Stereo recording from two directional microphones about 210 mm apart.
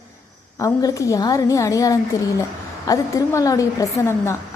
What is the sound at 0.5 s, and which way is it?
A woman's voice, 15° left (ahead or behind).